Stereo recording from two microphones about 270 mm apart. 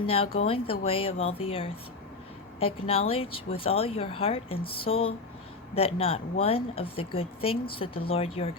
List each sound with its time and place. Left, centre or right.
0.3 s speech: left